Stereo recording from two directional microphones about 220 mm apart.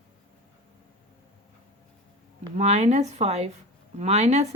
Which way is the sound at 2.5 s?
30° right (ahead or behind).